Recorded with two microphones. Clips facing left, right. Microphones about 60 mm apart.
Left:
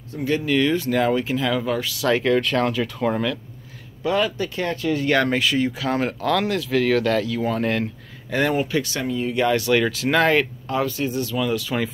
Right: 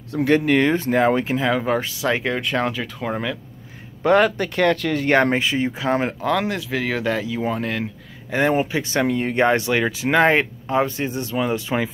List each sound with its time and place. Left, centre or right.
0.1 s speech: right
2.0 s speech: centre
4.0 s speech: right
5.1 s speech: right
5.4 s speech: right
9.0 s speech: right
9.4 s speech: right